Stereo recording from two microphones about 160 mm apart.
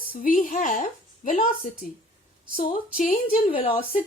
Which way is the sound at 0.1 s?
60° left (ahead or behind).